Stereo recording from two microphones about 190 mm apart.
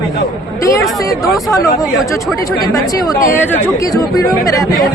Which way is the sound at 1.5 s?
15° left (ahead or behind).